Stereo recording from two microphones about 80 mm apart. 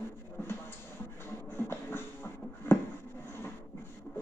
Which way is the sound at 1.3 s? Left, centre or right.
Left.